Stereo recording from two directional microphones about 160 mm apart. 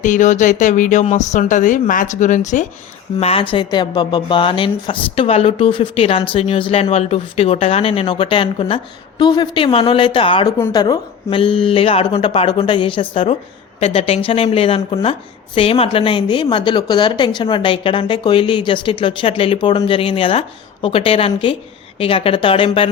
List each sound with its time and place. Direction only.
0.0 s speech: 50° left (ahead or behind)
3.2 s speech: 40° left (ahead or behind)
10.6 s speech: 25° left (ahead or behind)